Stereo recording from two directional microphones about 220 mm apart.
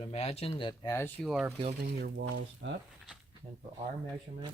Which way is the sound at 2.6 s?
60° right (ahead or behind).